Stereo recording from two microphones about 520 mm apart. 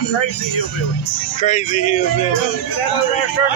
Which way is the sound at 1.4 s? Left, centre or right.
Centre.